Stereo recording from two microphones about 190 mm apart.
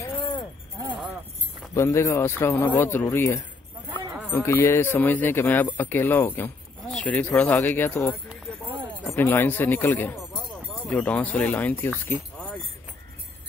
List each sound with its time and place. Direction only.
0.0 s chink: 20° left (ahead or behind)
1.7 s speech: 15° left (ahead or behind)
9.1 s speech: 10° left (ahead or behind)